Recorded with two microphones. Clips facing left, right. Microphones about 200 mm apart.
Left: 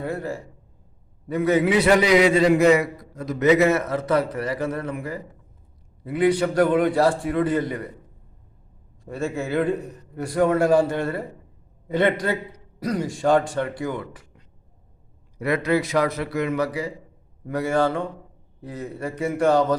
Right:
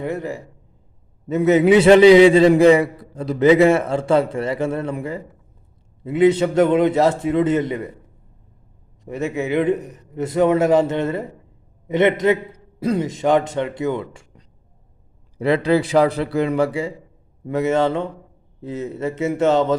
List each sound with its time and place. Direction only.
0.0 s a man's voice: 20° right (ahead or behind)
9.0 s a man's voice: 20° right (ahead or behind)